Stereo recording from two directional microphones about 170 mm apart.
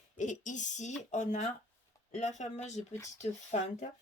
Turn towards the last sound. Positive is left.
turn(degrees=40)  # may be behind; listen again after turning